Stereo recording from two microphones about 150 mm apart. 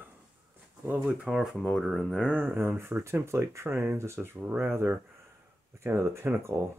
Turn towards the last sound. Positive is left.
turn(degrees=-20)  # may be behind; listen again after turning